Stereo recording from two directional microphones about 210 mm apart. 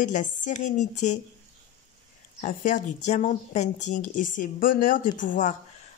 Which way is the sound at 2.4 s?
40° left (ahead or behind).